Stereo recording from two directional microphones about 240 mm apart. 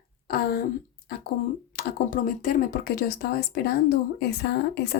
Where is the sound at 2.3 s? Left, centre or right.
Left.